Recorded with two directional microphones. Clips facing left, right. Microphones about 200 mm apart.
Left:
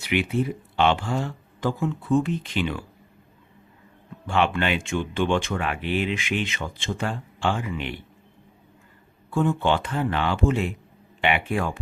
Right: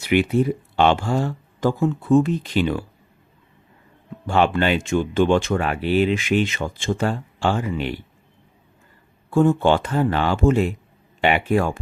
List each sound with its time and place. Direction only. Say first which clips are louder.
0.0 s speech: right 6 dB; 40° right (ahead or behind)
4.3 s speech: right 4 dB; 40° right (ahead or behind)
9.3 s speech: right 6 dB; 40° right (ahead or behind)